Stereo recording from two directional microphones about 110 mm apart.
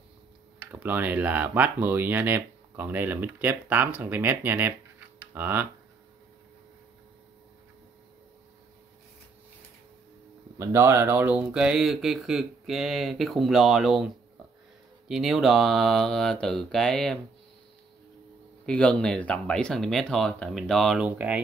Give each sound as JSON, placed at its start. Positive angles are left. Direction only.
{"t": 0.7, "sound": "speech", "side_deg": -15}
{"t": 10.6, "sound": "speech", "side_deg": -25}
{"t": 18.7, "sound": "speech", "side_deg": 10}
{"t": 21.0, "sound": "speech", "side_deg": -10}